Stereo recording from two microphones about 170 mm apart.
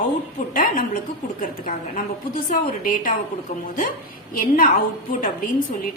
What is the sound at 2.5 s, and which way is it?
Speech, 55° left (ahead or behind).